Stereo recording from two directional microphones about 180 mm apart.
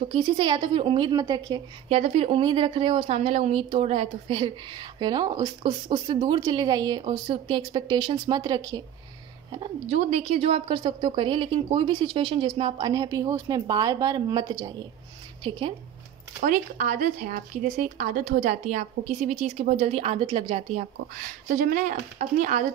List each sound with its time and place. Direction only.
0.1 s a woman's voice: 25° right (ahead or behind)
1.9 s a woman's voice: 35° right (ahead or behind); by 8.8 s 20° right (ahead or behind)
9.5 s a woman's voice: 30° right (ahead or behind)
16.4 s speech: 45° right (ahead or behind); by 20.6 s 30° right (ahead or behind)
20.7 s speech: 50° right (ahead or behind)